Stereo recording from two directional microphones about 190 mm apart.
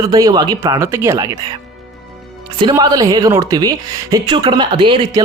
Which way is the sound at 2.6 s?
20° right (ahead or behind).